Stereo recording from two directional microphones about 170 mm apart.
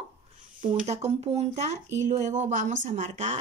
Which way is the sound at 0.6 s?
35° right (ahead or behind).